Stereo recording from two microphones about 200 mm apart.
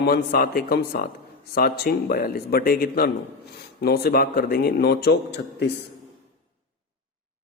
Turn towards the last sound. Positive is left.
turn(degrees=55)  # may be behind; listen again after turning